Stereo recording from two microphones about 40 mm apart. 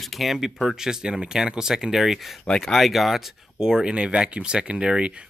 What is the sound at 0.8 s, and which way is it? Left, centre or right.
Speech, centre.